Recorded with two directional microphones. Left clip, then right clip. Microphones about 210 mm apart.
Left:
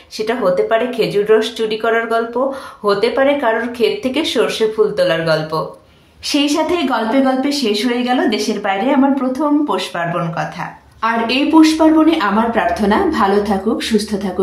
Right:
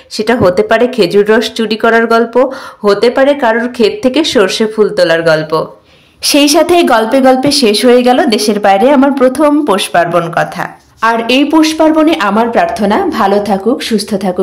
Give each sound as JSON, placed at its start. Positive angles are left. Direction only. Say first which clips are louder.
{"t": 0.2, "sound": "speech", "louder": "right 6 dB", "side_deg": -45}
{"t": 6.2, "sound": "a woman's voice", "louder": "right 8 dB", "side_deg": -50}